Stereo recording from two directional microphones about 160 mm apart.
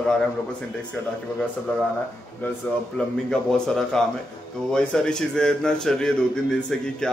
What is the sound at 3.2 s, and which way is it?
A man's voice, 5° left (ahead or behind).